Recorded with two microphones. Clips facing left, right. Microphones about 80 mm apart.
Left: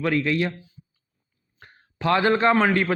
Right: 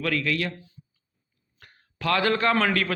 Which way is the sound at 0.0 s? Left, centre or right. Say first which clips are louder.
Left 4 dB; left.